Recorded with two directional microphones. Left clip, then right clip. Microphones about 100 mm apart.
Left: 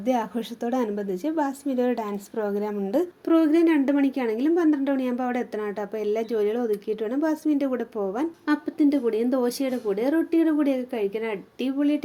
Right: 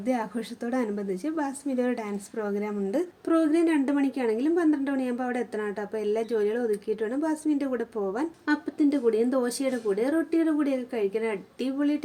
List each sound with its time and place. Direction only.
0.0 s a woman's voice: 20° left (ahead or behind)